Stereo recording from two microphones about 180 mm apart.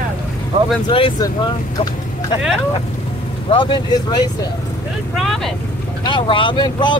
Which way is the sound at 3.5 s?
25° left (ahead or behind).